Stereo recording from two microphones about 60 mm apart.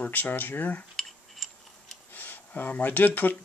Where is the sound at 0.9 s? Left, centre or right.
Centre.